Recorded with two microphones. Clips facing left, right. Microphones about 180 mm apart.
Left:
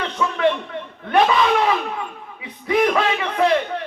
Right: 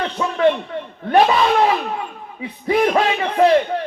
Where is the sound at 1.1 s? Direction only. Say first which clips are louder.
Right 2 dB; 40° right (ahead or behind).